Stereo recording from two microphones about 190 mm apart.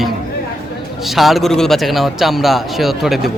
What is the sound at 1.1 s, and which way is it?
A man's voice, centre (ahead or behind).